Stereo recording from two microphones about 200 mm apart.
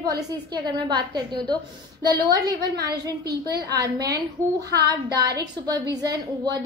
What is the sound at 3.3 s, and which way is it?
Speech, 55° right (ahead or behind).